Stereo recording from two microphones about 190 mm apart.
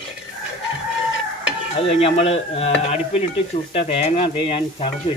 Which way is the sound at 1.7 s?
35° left (ahead or behind).